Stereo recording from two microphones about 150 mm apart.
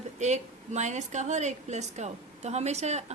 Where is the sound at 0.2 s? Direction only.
50° right (ahead or behind).